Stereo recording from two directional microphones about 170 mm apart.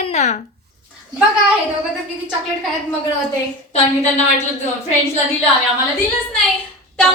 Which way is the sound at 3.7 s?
40° left (ahead or behind).